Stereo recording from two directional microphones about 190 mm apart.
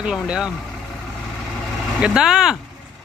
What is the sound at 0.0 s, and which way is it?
Speech, 5° right (ahead or behind).